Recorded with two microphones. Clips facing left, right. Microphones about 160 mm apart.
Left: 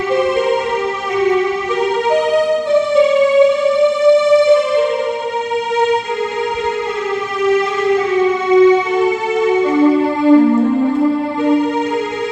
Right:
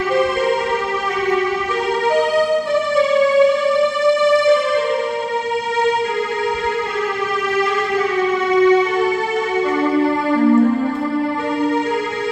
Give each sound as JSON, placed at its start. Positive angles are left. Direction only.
{"t": 0.1, "sound": "music", "side_deg": 20}
{"t": 2.7, "sound": "music", "side_deg": 20}
{"t": 7.4, "sound": "a sound", "side_deg": 20}
{"t": 9.7, "sound": "music", "side_deg": 20}